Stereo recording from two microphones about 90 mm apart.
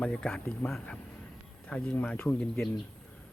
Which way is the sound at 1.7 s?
15° left (ahead or behind).